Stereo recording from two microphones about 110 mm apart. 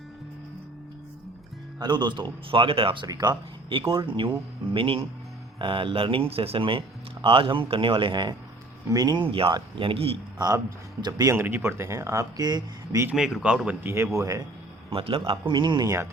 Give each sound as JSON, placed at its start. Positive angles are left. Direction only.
{"t": 1.8, "sound": "speech", "side_deg": -40}
{"t": 3.1, "sound": "speech", "side_deg": -35}
{"t": 3.9, "sound": "speech", "side_deg": -45}
{"t": 9.3, "sound": "speech", "side_deg": -55}
{"t": 10.3, "sound": "speech", "side_deg": -35}
{"t": 11.3, "sound": "speech", "side_deg": -20}
{"t": 13.1, "sound": "speech", "side_deg": -5}
{"t": 13.7, "sound": "speech", "side_deg": -20}
{"t": 14.9, "sound": "speech", "side_deg": -55}